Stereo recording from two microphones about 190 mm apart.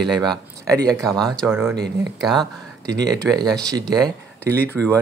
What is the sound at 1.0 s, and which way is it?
Speech, centre (ahead or behind).